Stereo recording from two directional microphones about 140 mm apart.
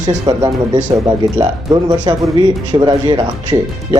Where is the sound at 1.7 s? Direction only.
30° right (ahead or behind).